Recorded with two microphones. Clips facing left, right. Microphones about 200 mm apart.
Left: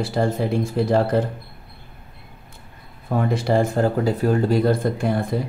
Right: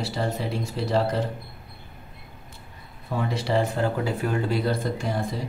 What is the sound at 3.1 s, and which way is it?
Speech, 50° left (ahead or behind).